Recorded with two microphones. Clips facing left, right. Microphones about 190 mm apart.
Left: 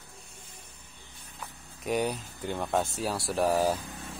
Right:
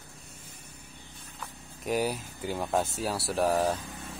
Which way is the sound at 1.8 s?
Centre (ahead or behind).